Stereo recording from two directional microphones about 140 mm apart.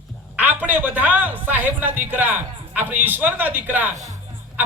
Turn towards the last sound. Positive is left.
turn(degrees=-55)  # may be behind; listen again after turning